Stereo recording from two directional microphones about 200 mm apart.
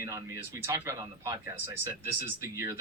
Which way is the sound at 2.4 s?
15° right (ahead or behind).